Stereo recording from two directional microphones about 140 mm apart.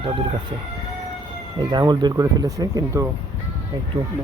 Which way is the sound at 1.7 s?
30° right (ahead or behind).